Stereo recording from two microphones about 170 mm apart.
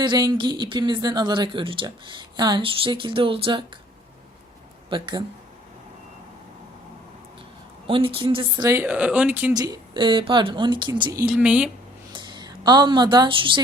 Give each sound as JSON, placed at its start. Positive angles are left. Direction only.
{"t": 0.0, "sound": "speech", "side_deg": -25}
{"t": 4.9, "sound": "speech", "side_deg": -30}
{"t": 7.9, "sound": "speech", "side_deg": -30}
{"t": 9.5, "sound": "speech", "side_deg": -20}
{"t": 11.3, "sound": "speech", "side_deg": -5}
{"t": 12.1, "sound": "a woman's voice", "side_deg": -25}